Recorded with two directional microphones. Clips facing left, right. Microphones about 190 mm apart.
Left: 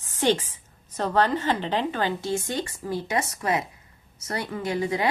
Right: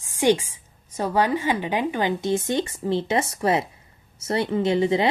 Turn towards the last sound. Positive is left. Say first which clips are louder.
# right 6 dB
turn(degrees=-25)  # may be behind; listen again after turning